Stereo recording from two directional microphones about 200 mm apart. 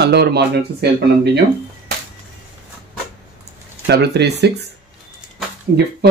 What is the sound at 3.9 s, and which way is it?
Speech, 55° right (ahead or behind).